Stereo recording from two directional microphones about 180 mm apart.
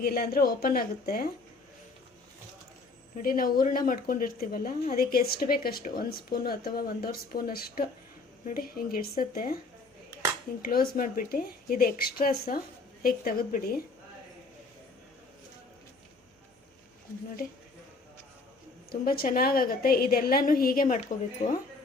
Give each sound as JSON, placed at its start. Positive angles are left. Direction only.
{"t": 0.0, "sound": "a woman's voice", "side_deg": 60}
{"t": 3.2, "sound": "a woman's voice", "side_deg": 50}
{"t": 10.6, "sound": "a woman's voice", "side_deg": 55}
{"t": 18.9, "sound": "a woman's voice", "side_deg": 55}